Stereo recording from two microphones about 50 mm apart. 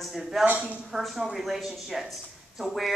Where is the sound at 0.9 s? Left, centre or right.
Centre.